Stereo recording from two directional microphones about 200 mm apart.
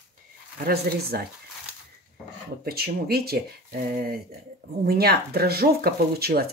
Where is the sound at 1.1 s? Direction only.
50° right (ahead or behind).